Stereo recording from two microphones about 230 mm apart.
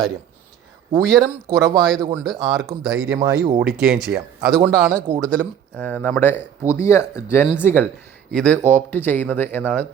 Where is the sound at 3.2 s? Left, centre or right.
Right.